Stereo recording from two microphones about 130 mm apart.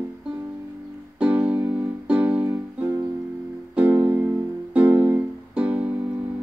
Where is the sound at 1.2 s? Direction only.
10° right (ahead or behind).